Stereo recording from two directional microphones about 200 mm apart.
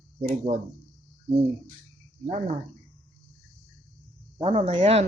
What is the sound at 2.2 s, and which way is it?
Speech, 35° right (ahead or behind).